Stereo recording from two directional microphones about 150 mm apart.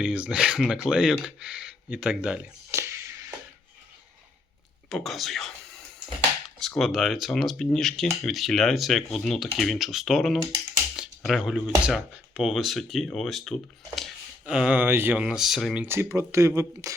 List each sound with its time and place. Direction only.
0.0 s speech: 5° right (ahead or behind)
4.9 s speech: centre (ahead or behind)
6.6 s speech: centre (ahead or behind)
10.9 s cutlery: centre (ahead or behind)
11.9 s speech: 5° right (ahead or behind); by 16.9 s 20° right (ahead or behind)